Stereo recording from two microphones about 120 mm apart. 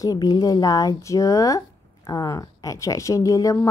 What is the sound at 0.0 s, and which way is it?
Speech, 30° left (ahead or behind).